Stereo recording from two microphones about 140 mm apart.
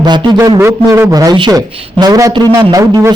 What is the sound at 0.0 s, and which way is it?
A man's voice, 25° right (ahead or behind).